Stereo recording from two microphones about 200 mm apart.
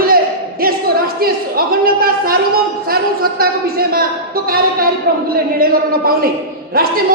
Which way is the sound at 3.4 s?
50° right (ahead or behind).